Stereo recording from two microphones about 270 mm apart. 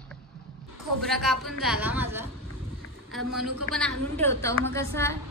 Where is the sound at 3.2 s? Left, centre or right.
Right.